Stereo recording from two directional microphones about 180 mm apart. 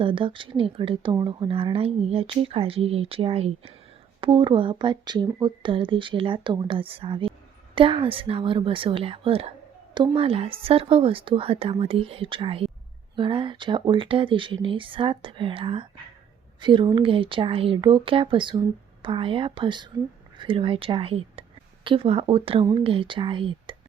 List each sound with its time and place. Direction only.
0.0 s speech: 30° right (ahead or behind)